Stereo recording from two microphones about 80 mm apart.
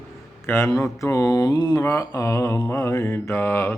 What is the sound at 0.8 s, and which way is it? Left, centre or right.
Mantra, left.